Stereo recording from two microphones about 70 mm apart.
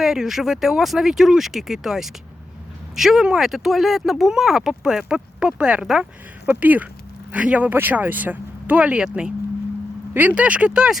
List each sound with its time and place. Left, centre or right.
0.0 s speech: centre
6.4 s speech: right